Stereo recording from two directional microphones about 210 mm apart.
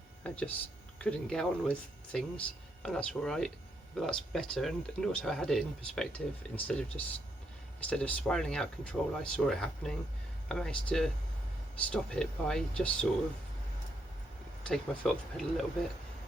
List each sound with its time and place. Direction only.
0.2 s speech: 5° left (ahead or behind)
14.6 s speech: centre (ahead or behind)